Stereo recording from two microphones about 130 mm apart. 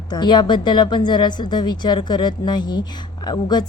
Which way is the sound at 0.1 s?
35° left (ahead or behind).